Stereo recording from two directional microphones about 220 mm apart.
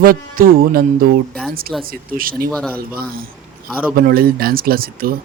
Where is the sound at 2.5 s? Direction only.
5° left (ahead or behind).